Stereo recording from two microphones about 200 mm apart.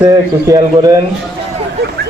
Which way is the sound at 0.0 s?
20° right (ahead or behind).